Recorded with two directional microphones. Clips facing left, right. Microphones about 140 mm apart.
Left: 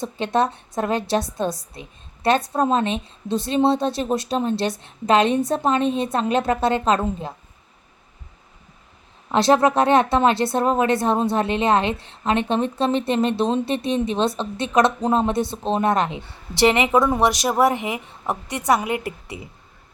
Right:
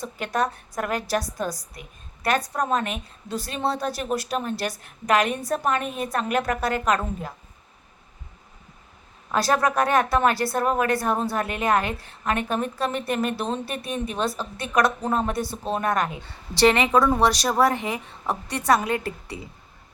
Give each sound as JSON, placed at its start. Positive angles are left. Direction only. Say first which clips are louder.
{"t": 0.0, "sound": "speech", "louder": "left 5 dB", "side_deg": 25}
{"t": 9.3, "sound": "speech", "louder": "left 5 dB", "side_deg": 25}